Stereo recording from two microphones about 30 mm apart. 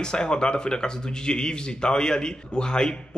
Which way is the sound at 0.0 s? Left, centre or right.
Left.